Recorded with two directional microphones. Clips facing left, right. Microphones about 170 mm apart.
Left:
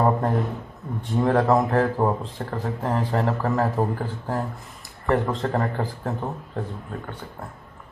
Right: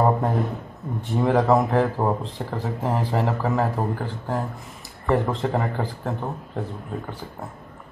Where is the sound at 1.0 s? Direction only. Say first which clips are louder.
Even; centre (ahead or behind).